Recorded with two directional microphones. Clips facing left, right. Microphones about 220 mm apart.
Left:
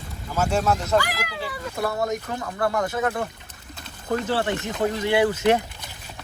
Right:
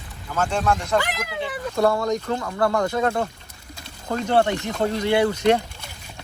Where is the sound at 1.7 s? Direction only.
50° right (ahead or behind).